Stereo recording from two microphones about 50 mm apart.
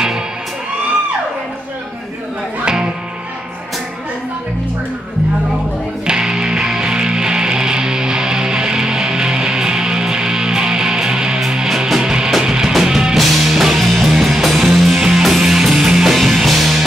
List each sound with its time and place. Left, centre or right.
2.6 s music: centre
6.0 s music: centre